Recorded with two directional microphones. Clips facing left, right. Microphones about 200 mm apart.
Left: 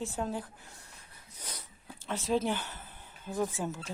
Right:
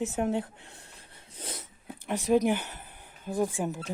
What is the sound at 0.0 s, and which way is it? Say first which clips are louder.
Speech: right 6 dB; 20° right (ahead or behind).